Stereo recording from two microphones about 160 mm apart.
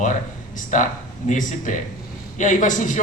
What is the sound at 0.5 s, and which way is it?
A man's voice, 55° left (ahead or behind).